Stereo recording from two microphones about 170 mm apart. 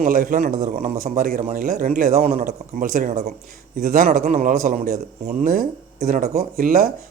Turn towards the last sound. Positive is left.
turn(degrees=-60)  # may be behind; listen again after turning